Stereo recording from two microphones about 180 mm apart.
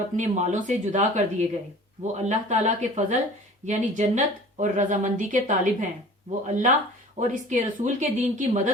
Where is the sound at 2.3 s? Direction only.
40° right (ahead or behind).